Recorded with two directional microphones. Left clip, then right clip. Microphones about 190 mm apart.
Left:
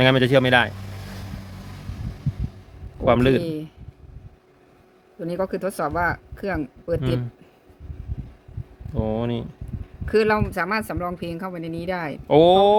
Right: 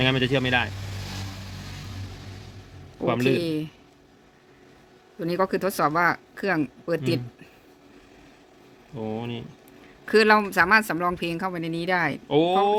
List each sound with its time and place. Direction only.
0.0 s speech: 60° left (ahead or behind)
3.1 s speech: 60° left (ahead or behind)
3.4 s speech: 10° right (ahead or behind)
5.2 s speech: 15° right (ahead or behind)
9.0 s speech: 65° left (ahead or behind)
10.1 s speech: 15° right (ahead or behind)
12.3 s speech: 70° left (ahead or behind)